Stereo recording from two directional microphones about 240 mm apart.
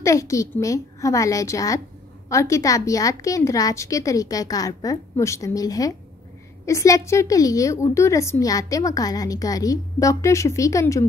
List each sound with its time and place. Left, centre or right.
0.0 s a woman's voice: centre